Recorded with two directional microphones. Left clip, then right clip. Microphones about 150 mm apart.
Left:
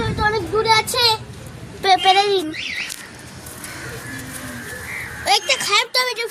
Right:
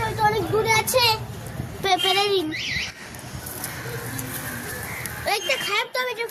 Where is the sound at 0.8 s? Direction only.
15° left (ahead or behind).